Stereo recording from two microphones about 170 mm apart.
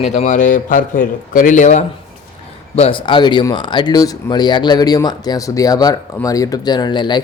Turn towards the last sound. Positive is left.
turn(degrees=25)  # may be behind; listen again after turning